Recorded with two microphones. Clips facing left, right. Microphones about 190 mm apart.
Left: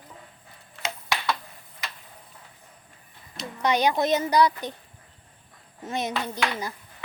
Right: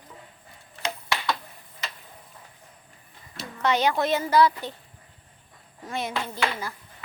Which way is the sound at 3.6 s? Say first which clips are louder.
Left 1 dB; 15° left (ahead or behind).